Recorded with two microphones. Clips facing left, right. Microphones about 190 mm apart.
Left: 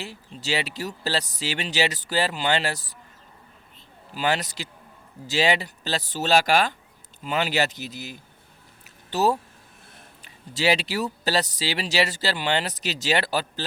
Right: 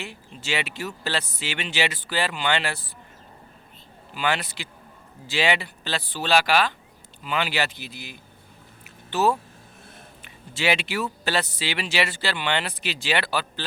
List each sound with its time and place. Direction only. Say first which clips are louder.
0.0 s speech: left 1 dB; 35° left (ahead or behind)
4.1 s speech: left 1 dB; 40° left (ahead or behind)
8.8 s a sound: even; 40° left (ahead or behind)
10.2 s speech: left 2 dB; 35° left (ahead or behind)